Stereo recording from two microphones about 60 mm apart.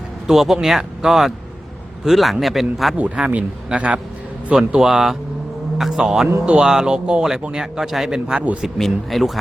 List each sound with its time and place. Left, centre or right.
0.3 s speech: centre
3.2 s speech: centre
6.4 s speech: centre